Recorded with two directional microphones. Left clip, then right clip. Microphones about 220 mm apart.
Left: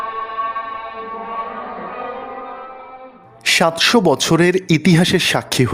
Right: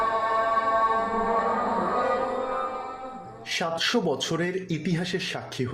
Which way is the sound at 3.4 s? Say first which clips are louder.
Left 13 dB; 50° left (ahead or behind).